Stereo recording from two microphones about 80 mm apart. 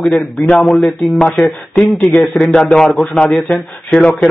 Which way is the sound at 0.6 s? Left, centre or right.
Centre.